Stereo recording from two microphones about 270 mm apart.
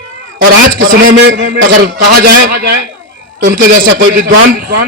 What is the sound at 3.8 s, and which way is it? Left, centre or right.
Speech, right.